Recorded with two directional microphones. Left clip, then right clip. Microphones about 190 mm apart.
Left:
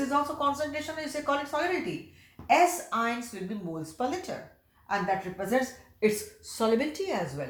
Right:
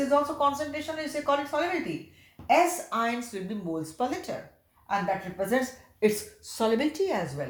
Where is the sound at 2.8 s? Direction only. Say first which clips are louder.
Right 1 dB; 30° right (ahead or behind).